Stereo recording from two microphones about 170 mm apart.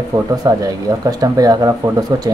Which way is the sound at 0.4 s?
20° right (ahead or behind).